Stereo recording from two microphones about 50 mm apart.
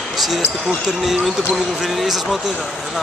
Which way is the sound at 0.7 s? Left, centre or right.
Centre.